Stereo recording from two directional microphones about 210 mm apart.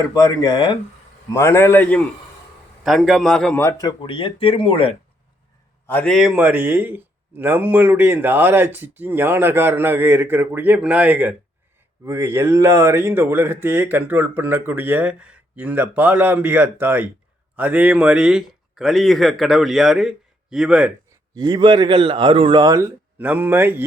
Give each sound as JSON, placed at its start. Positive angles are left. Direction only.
{"t": 0.0, "sound": "a man's voice", "side_deg": 15}
{"t": 5.8, "sound": "a man's voice", "side_deg": 5}
{"t": 21.3, "sound": "a man's voice", "side_deg": -20}